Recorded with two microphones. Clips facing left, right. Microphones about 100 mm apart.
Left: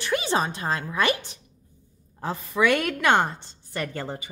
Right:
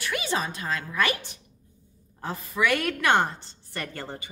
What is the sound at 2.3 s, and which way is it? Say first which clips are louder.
A woman's voice: left 3 dB; 25° left (ahead or behind).